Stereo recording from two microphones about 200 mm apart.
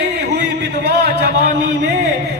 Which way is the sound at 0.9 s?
55° right (ahead or behind).